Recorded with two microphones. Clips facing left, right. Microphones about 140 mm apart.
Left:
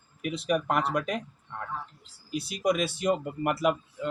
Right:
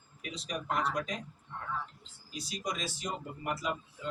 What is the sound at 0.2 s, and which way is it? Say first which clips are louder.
Speech: left 12 dB; 60° left (ahead or behind).